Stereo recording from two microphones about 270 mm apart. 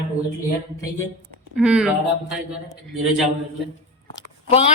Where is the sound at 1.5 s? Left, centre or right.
Centre.